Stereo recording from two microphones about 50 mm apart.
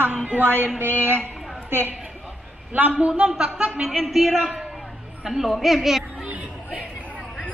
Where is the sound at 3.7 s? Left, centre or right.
Centre.